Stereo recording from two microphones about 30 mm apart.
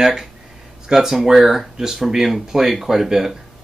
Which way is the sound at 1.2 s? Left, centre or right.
Centre.